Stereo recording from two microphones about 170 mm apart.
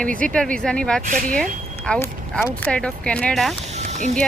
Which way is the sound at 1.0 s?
50° right (ahead or behind).